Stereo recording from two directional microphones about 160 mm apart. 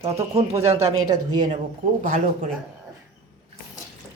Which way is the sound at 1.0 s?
25° right (ahead or behind).